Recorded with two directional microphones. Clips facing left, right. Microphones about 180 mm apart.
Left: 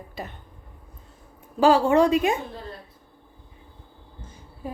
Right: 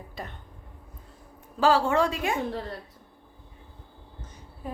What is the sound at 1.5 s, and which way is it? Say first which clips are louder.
Speech: left 5 dB; 15° left (ahead or behind).